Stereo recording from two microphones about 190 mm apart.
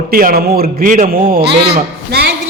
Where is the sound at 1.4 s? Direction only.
30° right (ahead or behind).